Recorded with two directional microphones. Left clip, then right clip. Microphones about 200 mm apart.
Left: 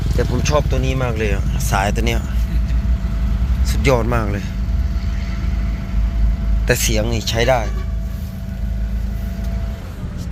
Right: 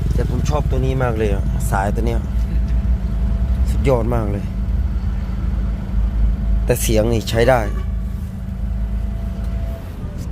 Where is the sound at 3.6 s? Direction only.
10° right (ahead or behind).